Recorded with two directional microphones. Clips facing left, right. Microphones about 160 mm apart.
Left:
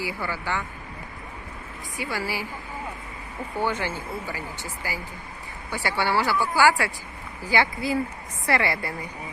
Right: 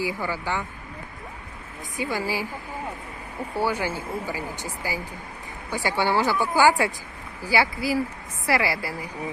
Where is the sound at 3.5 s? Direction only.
10° right (ahead or behind).